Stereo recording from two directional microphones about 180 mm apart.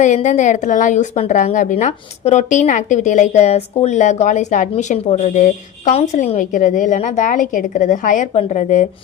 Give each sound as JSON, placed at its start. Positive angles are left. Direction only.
{"t": 0.0, "sound": "a woman's voice", "side_deg": 40}